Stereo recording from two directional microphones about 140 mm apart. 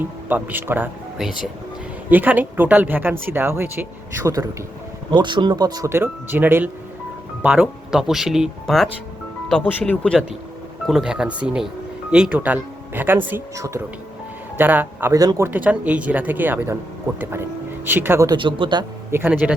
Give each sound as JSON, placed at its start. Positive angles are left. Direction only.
{"t": 0.0, "sound": "speech", "side_deg": -15}
{"t": 1.2, "sound": "speech", "side_deg": -5}
{"t": 5.1, "sound": "speech", "side_deg": -35}
{"t": 10.8, "sound": "speech", "side_deg": -5}
{"t": 17.8, "sound": "speech", "side_deg": -15}
{"t": 18.3, "sound": "speech", "side_deg": -35}
{"t": 19.1, "sound": "speech", "side_deg": -15}